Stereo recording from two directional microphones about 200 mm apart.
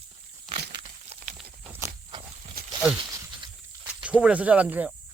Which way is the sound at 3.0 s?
20° right (ahead or behind).